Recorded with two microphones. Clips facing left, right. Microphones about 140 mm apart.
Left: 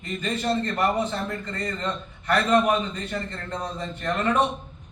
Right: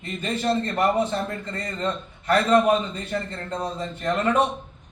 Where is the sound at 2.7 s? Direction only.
30° right (ahead or behind).